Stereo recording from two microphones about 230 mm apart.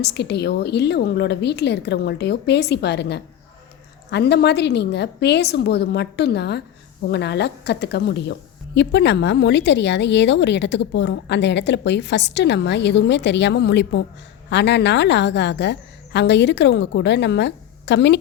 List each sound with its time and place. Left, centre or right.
0.0 s a woman's voice: left